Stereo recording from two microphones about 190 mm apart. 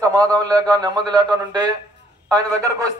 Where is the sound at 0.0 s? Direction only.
20° right (ahead or behind).